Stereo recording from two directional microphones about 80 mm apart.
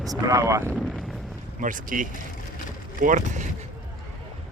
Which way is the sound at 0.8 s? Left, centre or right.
Centre.